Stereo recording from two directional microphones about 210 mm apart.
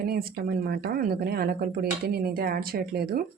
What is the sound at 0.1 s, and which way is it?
Speech, 45° right (ahead or behind).